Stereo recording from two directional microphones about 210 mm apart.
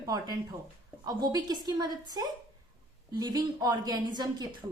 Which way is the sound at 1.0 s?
20° right (ahead or behind).